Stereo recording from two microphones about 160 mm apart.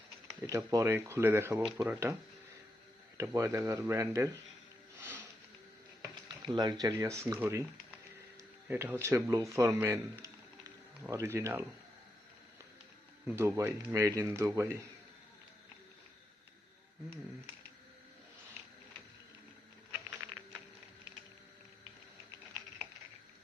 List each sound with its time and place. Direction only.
0.4 s speech: 20° right (ahead or behind)
3.2 s speech: 20° right (ahead or behind)
4.9 s music: 15° right (ahead or behind)
6.5 s speech: 25° right (ahead or behind)
13.2 s speech: 15° right (ahead or behind)